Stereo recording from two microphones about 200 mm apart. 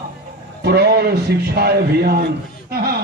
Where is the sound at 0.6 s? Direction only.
50° right (ahead or behind).